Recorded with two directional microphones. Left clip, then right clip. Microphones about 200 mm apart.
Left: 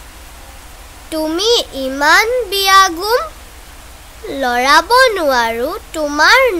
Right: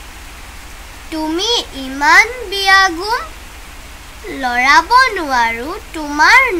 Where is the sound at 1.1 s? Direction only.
60° left (ahead or behind).